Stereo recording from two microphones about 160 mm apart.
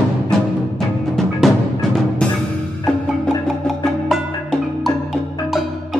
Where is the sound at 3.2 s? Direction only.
Centre (ahead or behind).